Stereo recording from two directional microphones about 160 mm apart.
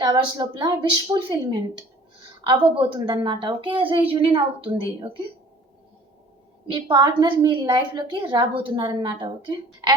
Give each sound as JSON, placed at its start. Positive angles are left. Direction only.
{"t": 0.0, "sound": "a woman's voice", "side_deg": -25}
{"t": 6.7, "sound": "a woman's voice", "side_deg": -30}